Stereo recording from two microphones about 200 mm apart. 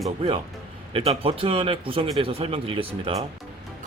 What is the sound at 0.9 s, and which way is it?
Speech, 30° right (ahead or behind).